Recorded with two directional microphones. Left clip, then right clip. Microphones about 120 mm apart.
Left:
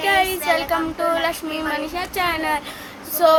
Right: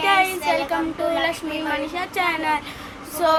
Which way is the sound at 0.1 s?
15° left (ahead or behind).